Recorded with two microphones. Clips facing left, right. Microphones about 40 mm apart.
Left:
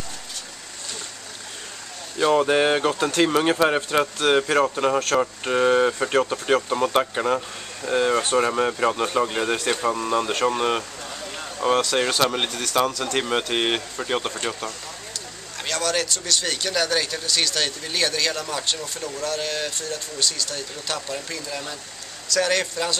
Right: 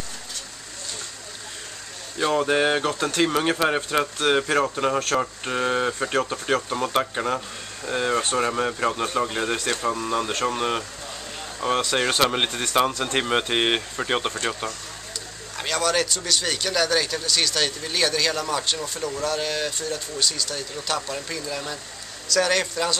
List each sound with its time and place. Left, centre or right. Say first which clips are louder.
2.1 s speech: left 3 dB; centre
11.8 s speech: even; centre
12.4 s speech: right 1 dB; right
15.5 s speech: right 2 dB; centre